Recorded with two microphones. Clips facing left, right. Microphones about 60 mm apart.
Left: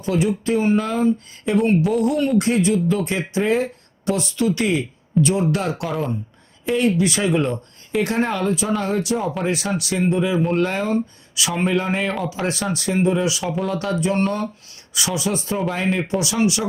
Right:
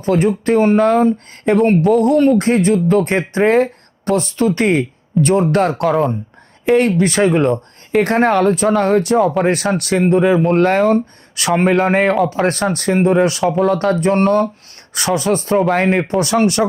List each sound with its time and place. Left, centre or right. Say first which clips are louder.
0.0 s speech: right 6 dB; right